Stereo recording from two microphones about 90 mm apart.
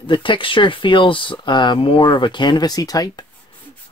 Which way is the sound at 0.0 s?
65° left (ahead or behind).